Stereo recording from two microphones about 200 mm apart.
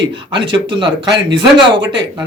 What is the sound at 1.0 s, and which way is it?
Speech, 60° right (ahead or behind).